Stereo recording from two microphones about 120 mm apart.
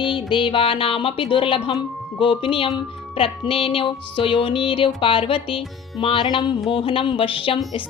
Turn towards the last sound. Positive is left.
turn(degrees=50)  # may be behind; listen again after turning